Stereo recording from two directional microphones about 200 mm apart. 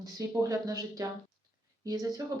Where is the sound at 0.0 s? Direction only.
15° right (ahead or behind).